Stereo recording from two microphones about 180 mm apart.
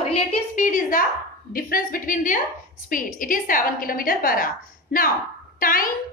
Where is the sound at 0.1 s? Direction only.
35° left (ahead or behind).